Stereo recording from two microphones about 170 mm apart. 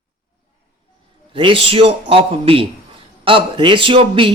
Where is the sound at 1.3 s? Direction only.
30° right (ahead or behind).